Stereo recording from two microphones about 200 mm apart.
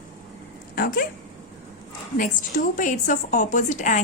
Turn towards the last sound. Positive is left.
turn(degrees=40)  # may be behind; listen again after turning